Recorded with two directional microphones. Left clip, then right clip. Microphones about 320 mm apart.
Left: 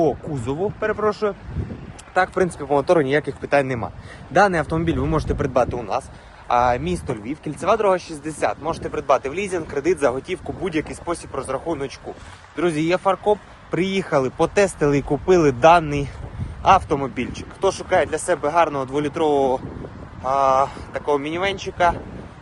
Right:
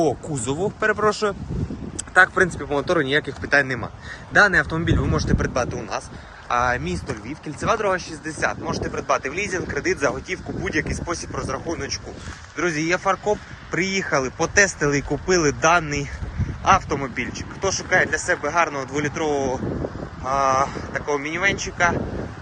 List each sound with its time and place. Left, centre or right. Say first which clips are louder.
0.0 s speech: left 1 dB; centre